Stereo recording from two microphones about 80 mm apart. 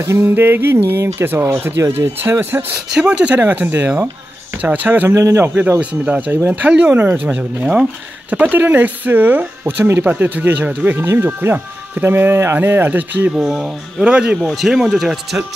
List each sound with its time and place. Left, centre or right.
0.0 s speech: right
2.9 s speech: centre
5.1 s speech: right
5.5 s speech: right
13.3 s speech: centre